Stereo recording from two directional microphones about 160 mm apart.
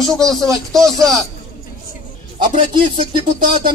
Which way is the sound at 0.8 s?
20° right (ahead or behind).